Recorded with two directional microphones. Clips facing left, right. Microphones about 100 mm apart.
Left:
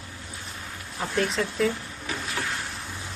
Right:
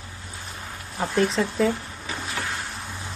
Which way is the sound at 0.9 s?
30° right (ahead or behind).